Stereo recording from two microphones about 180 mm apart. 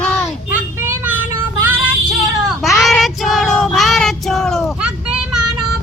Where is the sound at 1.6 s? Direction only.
10° right (ahead or behind).